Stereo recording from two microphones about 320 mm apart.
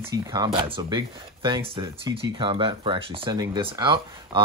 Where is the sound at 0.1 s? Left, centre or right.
Centre.